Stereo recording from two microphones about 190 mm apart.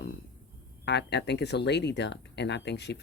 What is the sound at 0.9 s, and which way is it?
Speech, 60° left (ahead or behind).